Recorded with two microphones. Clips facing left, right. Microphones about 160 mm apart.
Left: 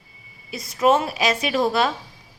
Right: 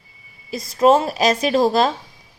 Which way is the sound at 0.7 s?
30° right (ahead or behind).